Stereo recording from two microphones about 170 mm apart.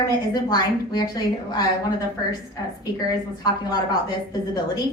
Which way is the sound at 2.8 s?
20° left (ahead or behind).